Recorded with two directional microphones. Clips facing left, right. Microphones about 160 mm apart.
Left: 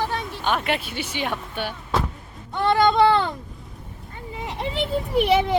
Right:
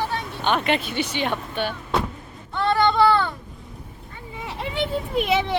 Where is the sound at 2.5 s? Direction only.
20° left (ahead or behind).